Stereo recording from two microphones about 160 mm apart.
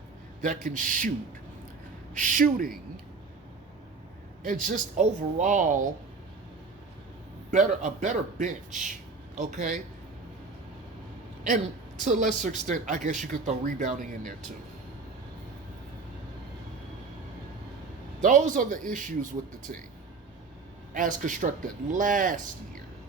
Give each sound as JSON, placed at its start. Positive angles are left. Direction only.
{"t": 0.4, "sound": "a man's voice", "side_deg": -55}
{"t": 2.1, "sound": "a man's voice", "side_deg": -55}
{"t": 4.9, "sound": "a woman's voice", "side_deg": -45}
{"t": 7.5, "sound": "a woman's voice", "side_deg": -50}
{"t": 11.4, "sound": "a woman's voice", "side_deg": -50}
{"t": 18.2, "sound": "a man's voice", "side_deg": -50}
{"t": 20.9, "sound": "a man's voice", "side_deg": -55}